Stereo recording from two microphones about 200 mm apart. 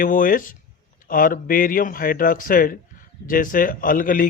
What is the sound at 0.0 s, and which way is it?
Speech, 45° left (ahead or behind).